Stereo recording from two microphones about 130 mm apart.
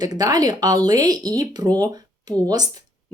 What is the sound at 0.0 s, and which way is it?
Speech, 30° right (ahead or behind).